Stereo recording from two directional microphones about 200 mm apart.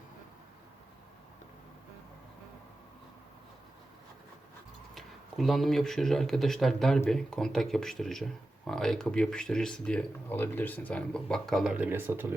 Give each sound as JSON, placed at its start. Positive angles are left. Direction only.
{"t": 4.9, "sound": "speech", "side_deg": 0}